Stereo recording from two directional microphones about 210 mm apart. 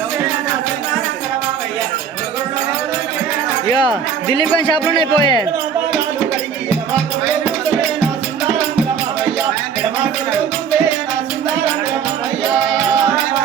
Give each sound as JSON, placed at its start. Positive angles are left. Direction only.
{"t": 4.4, "sound": "speech", "side_deg": 20}